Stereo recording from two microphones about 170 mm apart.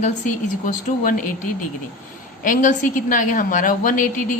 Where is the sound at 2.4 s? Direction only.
50° left (ahead or behind).